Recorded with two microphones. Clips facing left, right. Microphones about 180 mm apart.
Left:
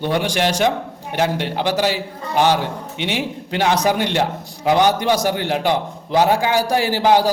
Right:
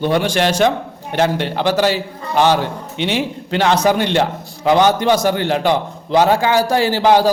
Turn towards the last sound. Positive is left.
turn(degrees=15)  # may be behind; listen again after turning